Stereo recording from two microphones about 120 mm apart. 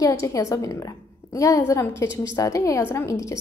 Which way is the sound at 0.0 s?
25° left (ahead or behind).